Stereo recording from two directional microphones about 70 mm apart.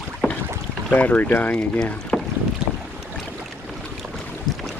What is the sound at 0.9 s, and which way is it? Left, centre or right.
Speech, left.